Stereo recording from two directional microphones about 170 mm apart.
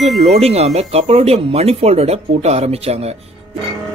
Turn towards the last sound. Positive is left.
turn(degrees=-40)  # may be behind; listen again after turning